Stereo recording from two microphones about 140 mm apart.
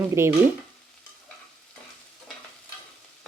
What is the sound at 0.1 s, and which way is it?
Speech, 20° right (ahead or behind).